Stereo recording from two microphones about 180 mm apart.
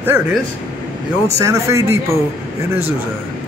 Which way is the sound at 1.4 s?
15° right (ahead or behind).